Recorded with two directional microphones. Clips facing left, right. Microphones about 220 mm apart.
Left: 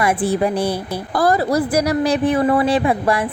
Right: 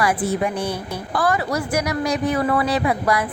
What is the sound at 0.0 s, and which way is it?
Speech, 30° left (ahead or behind).